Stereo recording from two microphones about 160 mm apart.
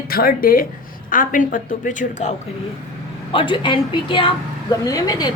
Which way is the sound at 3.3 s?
30° left (ahead or behind).